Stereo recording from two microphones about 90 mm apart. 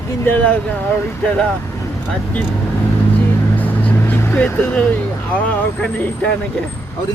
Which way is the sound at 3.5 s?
20° left (ahead or behind).